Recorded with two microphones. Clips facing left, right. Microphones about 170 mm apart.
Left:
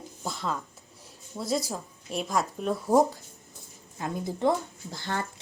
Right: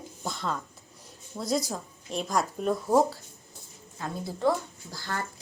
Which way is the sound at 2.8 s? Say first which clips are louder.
Left 2 dB; 15° left (ahead or behind).